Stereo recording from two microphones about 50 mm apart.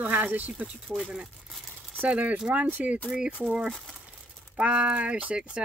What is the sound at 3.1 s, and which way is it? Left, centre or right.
Speech, centre.